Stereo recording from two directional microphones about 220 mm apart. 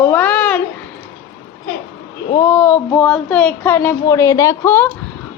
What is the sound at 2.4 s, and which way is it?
A man's voice, 10° left (ahead or behind).